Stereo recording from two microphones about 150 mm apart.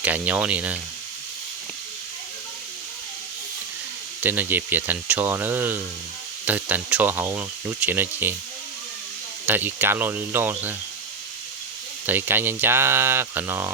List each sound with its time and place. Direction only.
0.0 s speech: 10° right (ahead or behind)
4.2 s speech: 15° right (ahead or behind)
9.5 s speech: 10° right (ahead or behind)
12.0 s speech: 15° right (ahead or behind)